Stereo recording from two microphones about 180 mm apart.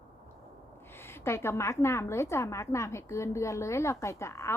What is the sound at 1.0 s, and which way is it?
A woman's voice, 15° left (ahead or behind).